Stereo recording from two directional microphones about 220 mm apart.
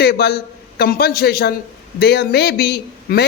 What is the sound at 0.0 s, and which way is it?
A man's voice, 45° left (ahead or behind).